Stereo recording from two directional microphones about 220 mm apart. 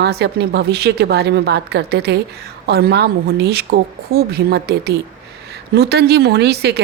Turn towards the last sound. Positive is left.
turn(degrees=-50)  # may be behind; listen again after turning